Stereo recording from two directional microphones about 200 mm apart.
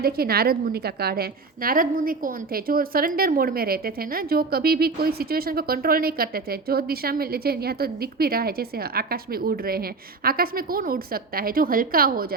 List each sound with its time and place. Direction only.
0.0 s a woman's voice: 50° right (ahead or behind)